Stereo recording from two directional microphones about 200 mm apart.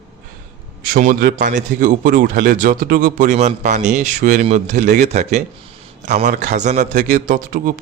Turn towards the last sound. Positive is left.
turn(degrees=-40)  # may be behind; listen again after turning